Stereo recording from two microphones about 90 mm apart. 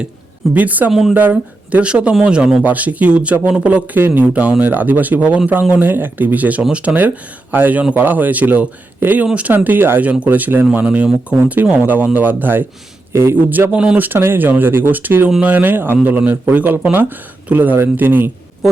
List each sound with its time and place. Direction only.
0.5 s a man's voice: 20° right (ahead or behind)
0.9 s speech: 5° right (ahead or behind)
1.1 s a man's voice: 20° right (ahead or behind)